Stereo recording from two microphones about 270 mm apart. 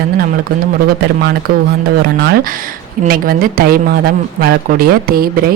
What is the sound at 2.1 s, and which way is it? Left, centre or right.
Speech, right.